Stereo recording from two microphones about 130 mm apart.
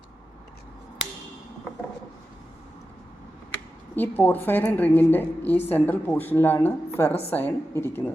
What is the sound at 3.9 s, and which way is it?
Speech, 15° left (ahead or behind).